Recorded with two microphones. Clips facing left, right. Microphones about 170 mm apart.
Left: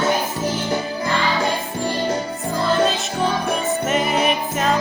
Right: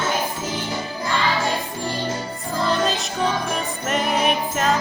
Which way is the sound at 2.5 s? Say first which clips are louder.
Left 3 dB; centre (ahead or behind).